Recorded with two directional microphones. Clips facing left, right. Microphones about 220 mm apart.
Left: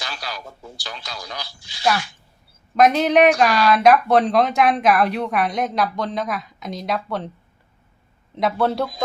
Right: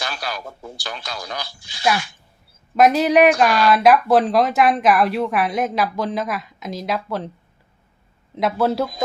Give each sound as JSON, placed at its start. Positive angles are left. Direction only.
{"t": 0.0, "sound": "speech", "side_deg": -55}
{"t": 2.7, "sound": "speech", "side_deg": -5}
{"t": 8.4, "sound": "speech", "side_deg": 0}